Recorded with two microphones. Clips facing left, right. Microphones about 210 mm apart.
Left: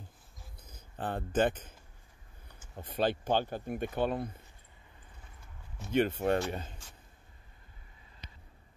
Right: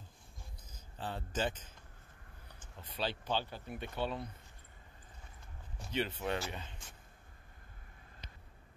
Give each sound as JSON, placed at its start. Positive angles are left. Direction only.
{"t": 0.7, "sound": "speech", "side_deg": 55}
{"t": 2.7, "sound": "speech", "side_deg": 50}
{"t": 5.9, "sound": "speech", "side_deg": 50}